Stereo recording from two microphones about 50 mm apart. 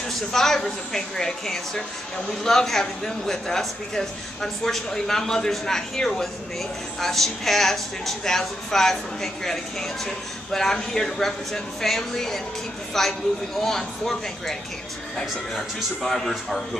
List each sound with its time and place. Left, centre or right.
0.3 s speech: centre
16.0 s a man's voice: centre